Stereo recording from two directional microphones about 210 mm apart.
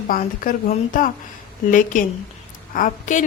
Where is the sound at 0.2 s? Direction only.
35° left (ahead or behind).